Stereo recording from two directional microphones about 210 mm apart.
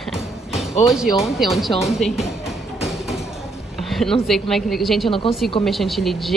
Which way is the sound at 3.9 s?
Centre (ahead or behind).